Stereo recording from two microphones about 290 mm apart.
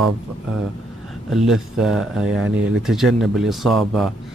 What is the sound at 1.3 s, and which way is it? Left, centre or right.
Speech, centre.